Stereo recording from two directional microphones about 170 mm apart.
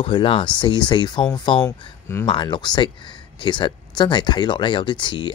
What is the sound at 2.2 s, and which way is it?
Speech, 25° left (ahead or behind).